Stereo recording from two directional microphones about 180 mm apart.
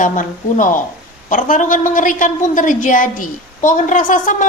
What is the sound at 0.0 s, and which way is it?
A woman's voice, 45° left (ahead or behind).